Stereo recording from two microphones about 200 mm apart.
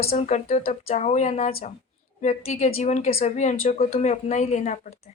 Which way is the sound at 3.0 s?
50° left (ahead or behind).